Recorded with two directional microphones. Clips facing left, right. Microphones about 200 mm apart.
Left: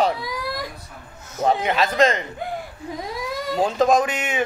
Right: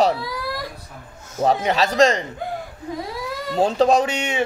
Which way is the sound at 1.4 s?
40° right (ahead or behind).